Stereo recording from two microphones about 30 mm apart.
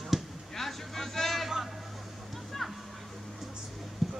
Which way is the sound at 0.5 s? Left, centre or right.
Centre.